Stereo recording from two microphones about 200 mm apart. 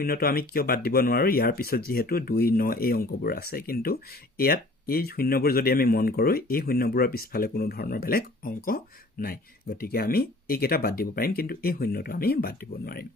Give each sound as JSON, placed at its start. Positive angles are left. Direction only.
{"t": 0.0, "sound": "speech", "side_deg": 50}